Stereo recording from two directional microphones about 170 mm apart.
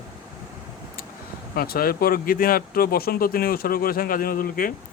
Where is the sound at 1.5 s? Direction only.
65° left (ahead or behind).